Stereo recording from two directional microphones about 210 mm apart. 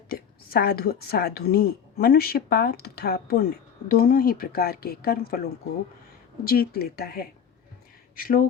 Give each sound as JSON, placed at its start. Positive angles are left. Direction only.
{"t": 0.1, "sound": "a woman's voice", "side_deg": 45}
{"t": 6.4, "sound": "speech", "side_deg": 45}